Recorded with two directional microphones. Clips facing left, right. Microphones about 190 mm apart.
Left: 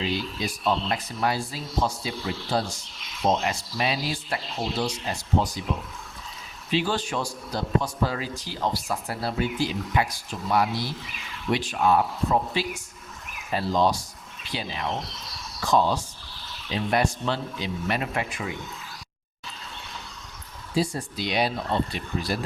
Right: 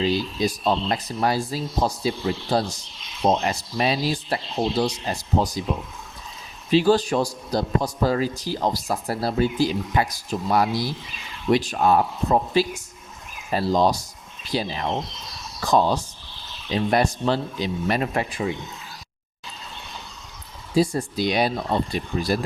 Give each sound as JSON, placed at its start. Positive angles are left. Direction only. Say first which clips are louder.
{"t": 0.0, "sound": "a man's voice", "louder": "right 6 dB", "side_deg": -35}
{"t": 6.7, "sound": "a man's voice", "louder": "right 8 dB", "side_deg": -40}
{"t": 20.7, "sound": "speech", "louder": "right 6 dB", "side_deg": -45}